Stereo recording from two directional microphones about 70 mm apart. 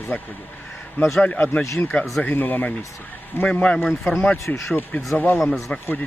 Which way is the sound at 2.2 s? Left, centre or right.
Left.